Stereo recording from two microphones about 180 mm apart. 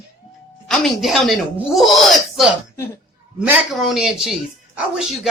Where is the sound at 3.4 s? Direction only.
5° right (ahead or behind).